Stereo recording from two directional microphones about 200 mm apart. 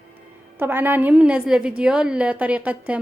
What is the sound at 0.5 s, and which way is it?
A woman's voice, 10° right (ahead or behind).